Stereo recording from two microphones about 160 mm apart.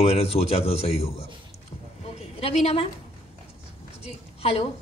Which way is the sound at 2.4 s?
40° left (ahead or behind).